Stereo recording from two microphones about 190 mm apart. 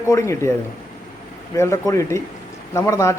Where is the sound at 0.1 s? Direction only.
15° left (ahead or behind).